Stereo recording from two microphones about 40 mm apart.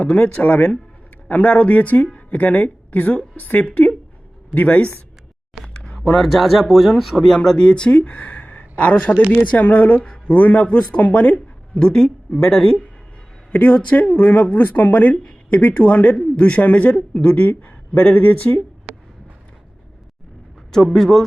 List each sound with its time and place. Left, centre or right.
0.0 s a woman's voice: left
3.7 s speech: left
6.0 s a man's voice: centre
7.3 s speech: centre
7.9 s speech: left
11.7 s speech: centre
13.5 s speech: left
15.7 s speech: left
20.9 s a man's voice: centre